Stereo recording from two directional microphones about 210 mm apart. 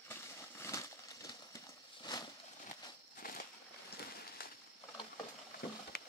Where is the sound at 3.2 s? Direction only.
45° left (ahead or behind).